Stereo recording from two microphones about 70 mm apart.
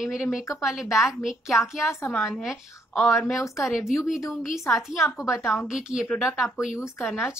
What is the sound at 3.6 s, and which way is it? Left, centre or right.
A woman's voice, centre.